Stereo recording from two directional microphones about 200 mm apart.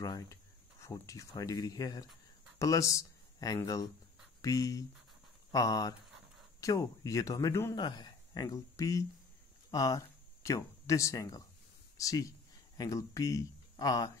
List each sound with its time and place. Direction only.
0.0 s speech: 15° left (ahead or behind)